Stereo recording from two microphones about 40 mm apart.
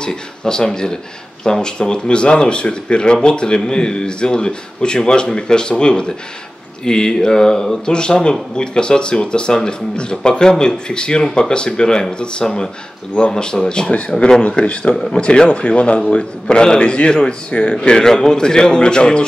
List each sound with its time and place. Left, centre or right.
0.0 s speech: left